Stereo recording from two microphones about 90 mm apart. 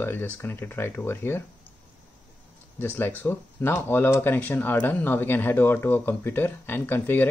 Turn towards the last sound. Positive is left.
turn(degrees=20)  # may be behind; listen again after turning